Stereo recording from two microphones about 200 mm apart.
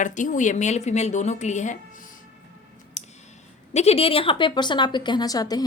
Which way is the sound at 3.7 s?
30° left (ahead or behind).